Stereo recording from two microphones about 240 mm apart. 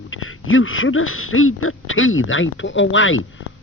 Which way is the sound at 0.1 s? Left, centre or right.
Left.